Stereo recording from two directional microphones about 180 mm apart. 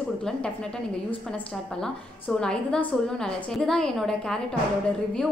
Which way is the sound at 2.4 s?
5° left (ahead or behind).